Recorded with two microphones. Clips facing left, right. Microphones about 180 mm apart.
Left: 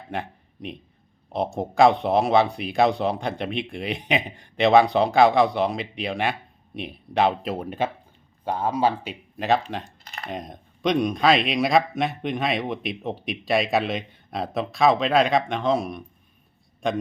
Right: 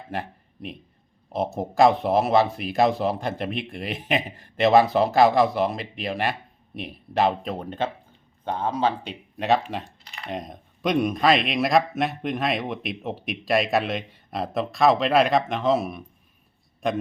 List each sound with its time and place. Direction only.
0.1 s a man's voice: centre (ahead or behind)
10.0 s typing: 45° left (ahead or behind)
10.2 s a man's voice: centre (ahead or behind)